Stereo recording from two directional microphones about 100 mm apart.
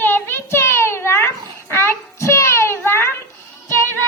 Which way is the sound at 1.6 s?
25° left (ahead or behind).